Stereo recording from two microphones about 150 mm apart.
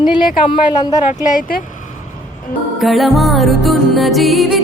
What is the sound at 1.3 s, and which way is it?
Speech, 70° left (ahead or behind).